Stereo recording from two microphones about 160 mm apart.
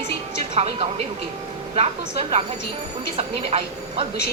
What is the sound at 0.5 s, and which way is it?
Speech, 40° right (ahead or behind).